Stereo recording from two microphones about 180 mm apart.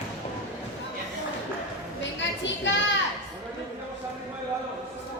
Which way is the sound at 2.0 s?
90° left.